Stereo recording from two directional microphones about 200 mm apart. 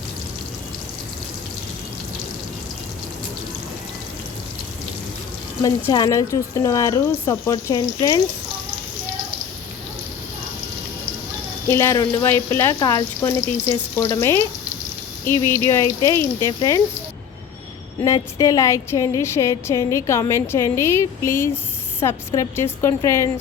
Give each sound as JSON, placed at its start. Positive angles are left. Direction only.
{"t": 5.9, "sound": "a woman's voice", "side_deg": 20}
{"t": 11.7, "sound": "a woman's voice", "side_deg": 15}
{"t": 18.0, "sound": "a woman's voice", "side_deg": 15}